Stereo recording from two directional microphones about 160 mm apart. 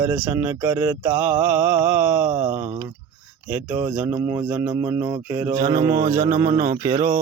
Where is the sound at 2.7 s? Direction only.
30° right (ahead or behind).